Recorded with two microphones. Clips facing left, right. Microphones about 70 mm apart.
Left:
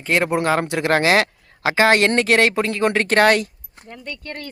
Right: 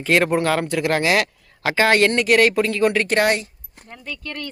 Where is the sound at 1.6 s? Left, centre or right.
Left.